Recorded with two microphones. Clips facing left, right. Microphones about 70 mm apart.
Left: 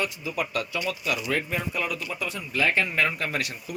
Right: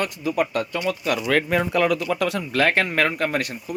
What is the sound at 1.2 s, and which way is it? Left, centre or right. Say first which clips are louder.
Speech: right 7 dB; right.